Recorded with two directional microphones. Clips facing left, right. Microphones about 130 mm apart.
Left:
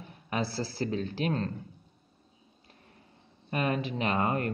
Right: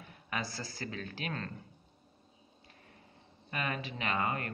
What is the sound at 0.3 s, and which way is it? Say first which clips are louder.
Speech: left 7 dB; 30° left (ahead or behind).